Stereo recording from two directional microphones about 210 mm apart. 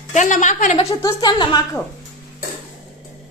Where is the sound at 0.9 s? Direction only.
15° left (ahead or behind).